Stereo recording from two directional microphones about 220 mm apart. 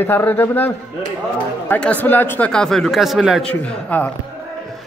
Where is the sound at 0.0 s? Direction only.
10° left (ahead or behind).